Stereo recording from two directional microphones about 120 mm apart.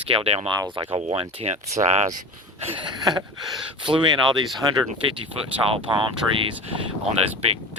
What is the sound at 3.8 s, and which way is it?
Speech, 40° right (ahead or behind).